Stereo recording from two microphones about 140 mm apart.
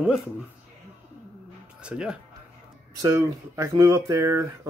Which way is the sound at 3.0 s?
20° right (ahead or behind).